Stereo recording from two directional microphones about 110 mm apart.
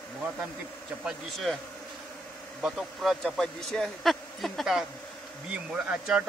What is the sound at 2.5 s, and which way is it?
A man's voice, 5° right (ahead or behind).